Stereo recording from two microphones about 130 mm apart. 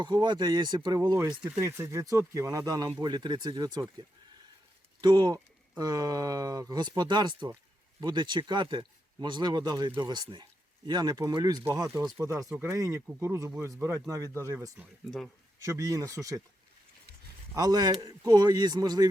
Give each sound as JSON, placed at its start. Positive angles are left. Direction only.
{"t": 0.0, "sound": "speech", "side_deg": -35}
{"t": 1.5, "sound": "speech", "side_deg": -20}
{"t": 4.9, "sound": "speech", "side_deg": -35}
{"t": 17.5, "sound": "speech", "side_deg": -30}